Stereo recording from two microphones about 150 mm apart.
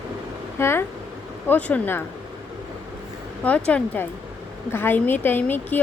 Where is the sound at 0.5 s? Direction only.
15° left (ahead or behind).